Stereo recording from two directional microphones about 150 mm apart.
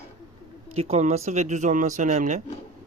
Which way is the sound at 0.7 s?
45° right (ahead or behind).